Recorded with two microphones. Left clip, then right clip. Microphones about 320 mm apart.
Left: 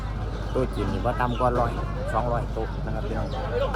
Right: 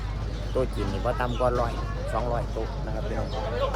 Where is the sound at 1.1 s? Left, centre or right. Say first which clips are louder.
Left 3 dB; centre.